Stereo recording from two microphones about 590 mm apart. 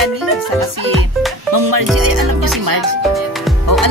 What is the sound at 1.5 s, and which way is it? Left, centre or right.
Speech, right.